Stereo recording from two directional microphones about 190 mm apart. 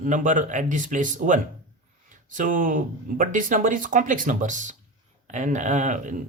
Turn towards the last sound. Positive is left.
turn(degrees=-40)  # may be behind; listen again after turning